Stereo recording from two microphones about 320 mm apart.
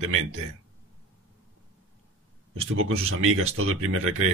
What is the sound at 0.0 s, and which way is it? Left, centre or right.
Speech, right.